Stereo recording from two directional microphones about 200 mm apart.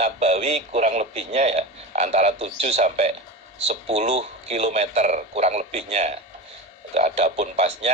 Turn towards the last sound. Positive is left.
turn(degrees=-35)  # may be behind; listen again after turning